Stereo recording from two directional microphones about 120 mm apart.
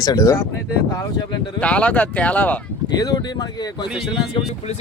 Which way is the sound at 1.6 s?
10° left (ahead or behind).